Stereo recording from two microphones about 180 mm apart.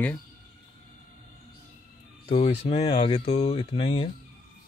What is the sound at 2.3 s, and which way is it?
Speech, 35° left (ahead or behind).